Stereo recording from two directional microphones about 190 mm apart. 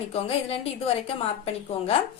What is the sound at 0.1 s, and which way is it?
A woman's voice, 30° left (ahead or behind).